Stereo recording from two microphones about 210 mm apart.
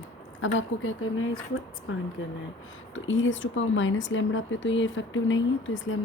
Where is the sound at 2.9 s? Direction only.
65° left (ahead or behind).